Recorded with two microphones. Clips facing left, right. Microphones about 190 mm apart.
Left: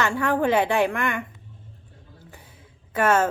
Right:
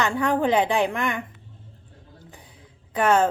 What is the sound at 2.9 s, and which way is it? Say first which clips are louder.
Speech: right 1 dB; 15° right (ahead or behind).